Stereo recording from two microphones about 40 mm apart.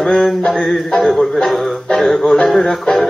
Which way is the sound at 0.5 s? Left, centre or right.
Centre.